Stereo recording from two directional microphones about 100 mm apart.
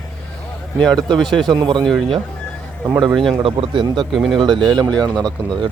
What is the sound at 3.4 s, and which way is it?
Speech, 65° right (ahead or behind).